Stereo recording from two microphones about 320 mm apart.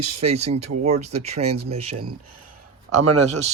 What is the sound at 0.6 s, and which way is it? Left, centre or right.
Speech, right.